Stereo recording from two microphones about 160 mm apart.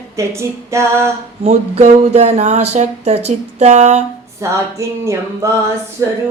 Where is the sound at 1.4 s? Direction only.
40° right (ahead or behind).